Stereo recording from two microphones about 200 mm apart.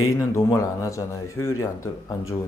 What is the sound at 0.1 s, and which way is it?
Speech, 15° left (ahead or behind).